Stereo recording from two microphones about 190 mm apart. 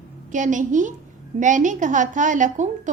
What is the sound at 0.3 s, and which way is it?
A woman's voice, 40° right (ahead or behind).